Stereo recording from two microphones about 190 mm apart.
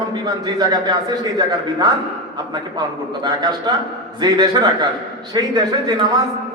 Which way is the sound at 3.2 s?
20° right (ahead or behind).